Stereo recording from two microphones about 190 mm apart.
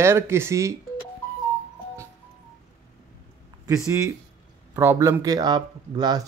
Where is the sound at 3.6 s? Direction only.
15° right (ahead or behind).